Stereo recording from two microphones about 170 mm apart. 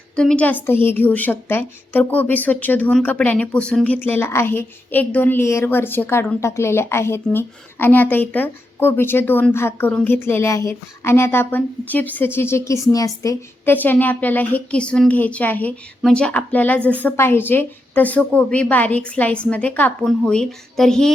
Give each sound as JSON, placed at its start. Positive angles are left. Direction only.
{"t": 0.2, "sound": "a woman's voice", "side_deg": 5}